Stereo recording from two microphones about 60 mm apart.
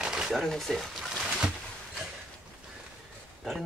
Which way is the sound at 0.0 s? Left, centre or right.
Centre.